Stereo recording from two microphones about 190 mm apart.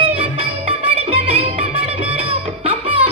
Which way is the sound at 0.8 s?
30° right (ahead or behind).